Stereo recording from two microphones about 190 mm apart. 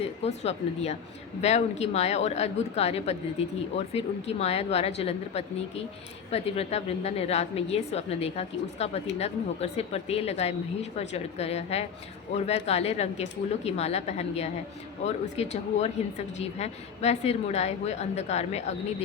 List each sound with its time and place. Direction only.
0.0 s a woman's voice: 35° left (ahead or behind)